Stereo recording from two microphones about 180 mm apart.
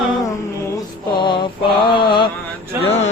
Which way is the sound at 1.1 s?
25° left (ahead or behind).